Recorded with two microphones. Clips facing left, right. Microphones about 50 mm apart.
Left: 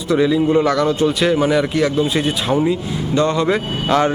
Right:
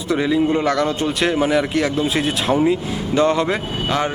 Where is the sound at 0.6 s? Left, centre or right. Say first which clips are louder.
Left 3 dB; right.